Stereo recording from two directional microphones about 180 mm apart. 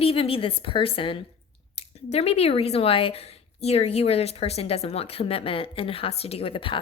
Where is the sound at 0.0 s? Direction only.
30° left (ahead or behind).